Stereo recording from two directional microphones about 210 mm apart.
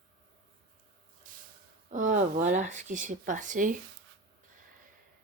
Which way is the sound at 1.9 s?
35° right (ahead or behind).